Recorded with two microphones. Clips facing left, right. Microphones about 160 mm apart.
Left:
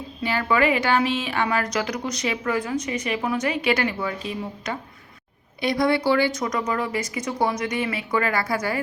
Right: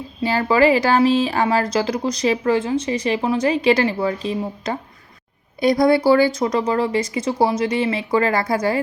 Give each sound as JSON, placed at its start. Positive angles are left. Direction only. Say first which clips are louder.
{"t": 0.2, "sound": "speech", "louder": "right 5 dB", "side_deg": -35}